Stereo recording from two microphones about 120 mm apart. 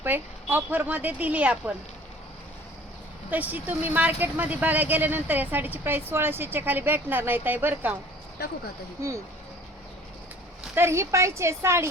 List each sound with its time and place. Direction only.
0.0 s speech: 15° right (ahead or behind)
3.2 s speech: 15° right (ahead or behind)
9.0 s a woman's voice: 25° right (ahead or behind)
10.8 s a woman's voice: 20° right (ahead or behind)